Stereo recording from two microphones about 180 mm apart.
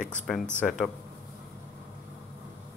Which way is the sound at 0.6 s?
5° left (ahead or behind).